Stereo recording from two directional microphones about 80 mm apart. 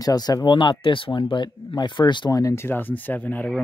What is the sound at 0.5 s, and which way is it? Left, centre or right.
Speech, left.